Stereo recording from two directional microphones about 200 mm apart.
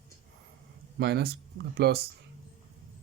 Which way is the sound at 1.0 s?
55° right (ahead or behind).